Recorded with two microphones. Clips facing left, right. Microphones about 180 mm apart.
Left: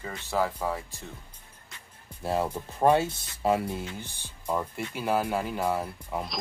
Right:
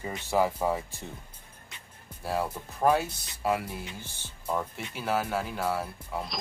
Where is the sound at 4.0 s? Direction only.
15° left (ahead or behind).